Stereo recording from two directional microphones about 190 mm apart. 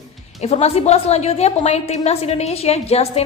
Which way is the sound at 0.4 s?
35° left (ahead or behind).